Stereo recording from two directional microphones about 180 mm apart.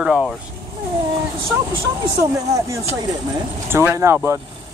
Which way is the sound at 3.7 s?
15° right (ahead or behind).